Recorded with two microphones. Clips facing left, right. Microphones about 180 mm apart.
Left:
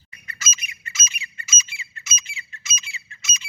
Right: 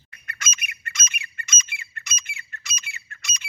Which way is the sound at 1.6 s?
55° right (ahead or behind).